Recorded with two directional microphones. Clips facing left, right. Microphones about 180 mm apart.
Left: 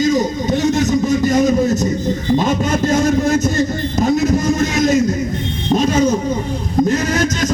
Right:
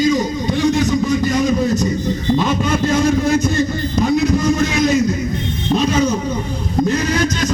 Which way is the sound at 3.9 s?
45° left (ahead or behind).